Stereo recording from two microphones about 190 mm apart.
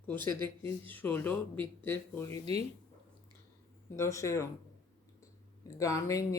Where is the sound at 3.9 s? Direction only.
15° left (ahead or behind).